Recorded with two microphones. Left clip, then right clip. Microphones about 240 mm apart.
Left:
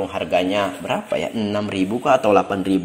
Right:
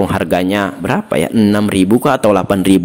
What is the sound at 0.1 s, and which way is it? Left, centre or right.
Speech, right.